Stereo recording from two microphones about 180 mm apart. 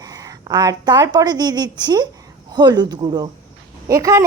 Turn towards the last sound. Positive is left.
turn(degrees=-20)  # may be behind; listen again after turning